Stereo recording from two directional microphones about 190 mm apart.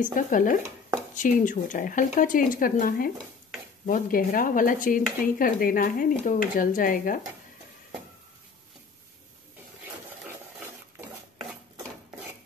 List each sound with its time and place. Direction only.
0.0 s speech: 45° left (ahead or behind)